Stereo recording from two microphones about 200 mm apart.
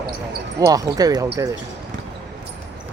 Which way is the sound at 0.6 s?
20° right (ahead or behind).